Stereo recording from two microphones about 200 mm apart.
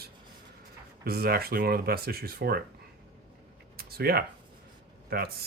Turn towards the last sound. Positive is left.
turn(degrees=-50)  # may be behind; listen again after turning